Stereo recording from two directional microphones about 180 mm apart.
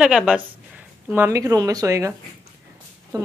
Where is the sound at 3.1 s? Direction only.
20° right (ahead or behind).